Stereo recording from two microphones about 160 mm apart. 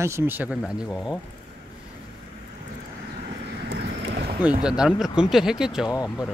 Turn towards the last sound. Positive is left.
turn(degrees=0)  # may be behind; listen again after turning